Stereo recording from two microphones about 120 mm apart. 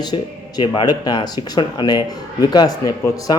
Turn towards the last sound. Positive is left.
turn(degrees=30)  # may be behind; listen again after turning